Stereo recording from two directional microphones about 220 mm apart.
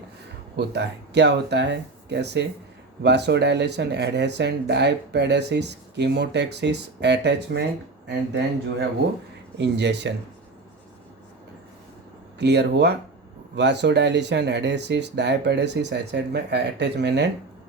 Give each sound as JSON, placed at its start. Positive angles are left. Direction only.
{"t": 0.5, "sound": "speech", "side_deg": -50}
{"t": 9.6, "sound": "speech", "side_deg": -50}
{"t": 12.4, "sound": "speech", "side_deg": -50}